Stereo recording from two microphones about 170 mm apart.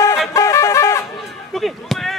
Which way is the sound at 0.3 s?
15° left (ahead or behind).